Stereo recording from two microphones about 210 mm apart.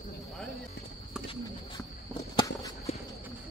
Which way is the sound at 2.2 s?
20° left (ahead or behind).